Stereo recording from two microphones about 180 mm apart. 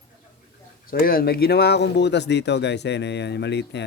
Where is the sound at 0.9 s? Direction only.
55° left (ahead or behind); by 3.8 s 70° left (ahead or behind).